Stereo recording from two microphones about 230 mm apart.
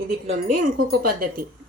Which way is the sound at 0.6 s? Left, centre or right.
Right.